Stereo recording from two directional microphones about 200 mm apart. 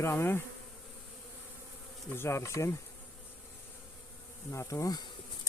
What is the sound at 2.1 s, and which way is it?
Bee, 15° left (ahead or behind).